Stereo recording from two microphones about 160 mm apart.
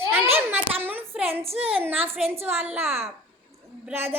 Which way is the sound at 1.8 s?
10° right (ahead or behind).